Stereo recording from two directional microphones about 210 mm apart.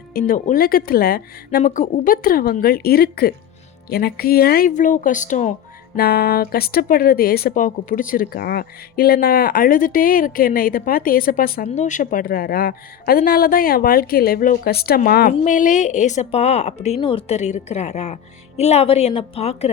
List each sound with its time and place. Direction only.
0.1 s speech: 45° left (ahead or behind)
6.0 s speech: 45° left (ahead or behind); by 19.7 s 30° left (ahead or behind)